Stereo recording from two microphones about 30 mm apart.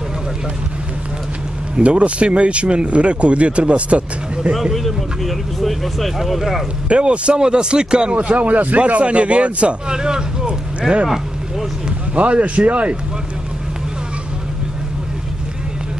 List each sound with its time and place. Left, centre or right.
1.8 s speech: right
4.7 s speech: centre
6.9 s a man's voice: right
8.2 s speech: right
9.8 s speech: right
10.4 s vehicle: right
12.2 s speech: right